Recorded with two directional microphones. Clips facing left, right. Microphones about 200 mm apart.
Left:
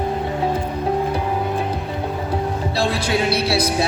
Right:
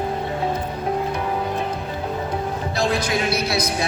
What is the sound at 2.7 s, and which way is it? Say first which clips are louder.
Music: left 1 dB; 30° left (ahead or behind).